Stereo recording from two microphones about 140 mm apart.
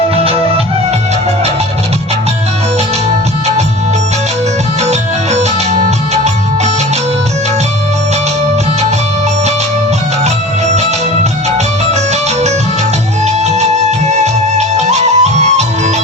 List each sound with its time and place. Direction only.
4.8 s music: 50° right (ahead or behind)
10.2 s music: 50° right (ahead or behind)
13.2 s music: 50° right (ahead or behind)